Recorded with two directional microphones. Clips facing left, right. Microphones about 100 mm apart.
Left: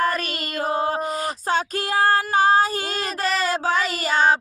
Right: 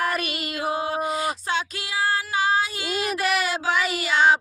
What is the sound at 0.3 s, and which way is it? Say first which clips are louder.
Child singing: left 2 dB; 40° left (ahead or behind).